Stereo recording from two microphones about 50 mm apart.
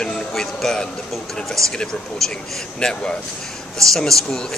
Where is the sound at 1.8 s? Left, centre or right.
Centre.